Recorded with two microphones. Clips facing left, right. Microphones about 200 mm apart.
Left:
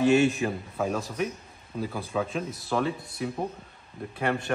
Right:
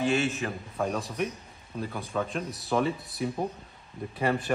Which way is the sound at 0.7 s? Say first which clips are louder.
Right 1 dB; centre (ahead or behind).